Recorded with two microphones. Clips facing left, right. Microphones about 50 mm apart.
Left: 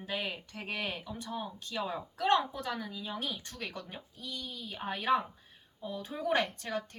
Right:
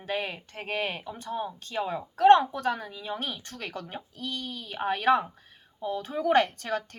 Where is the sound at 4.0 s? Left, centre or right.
Right.